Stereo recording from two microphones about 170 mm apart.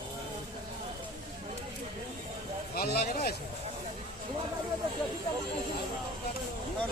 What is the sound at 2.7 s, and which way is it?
Speech, 70° left (ahead or behind).